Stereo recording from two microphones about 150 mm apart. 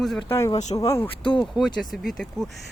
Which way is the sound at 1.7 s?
Centre (ahead or behind).